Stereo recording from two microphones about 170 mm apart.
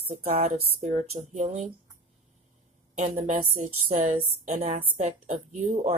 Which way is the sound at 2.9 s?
45° right (ahead or behind).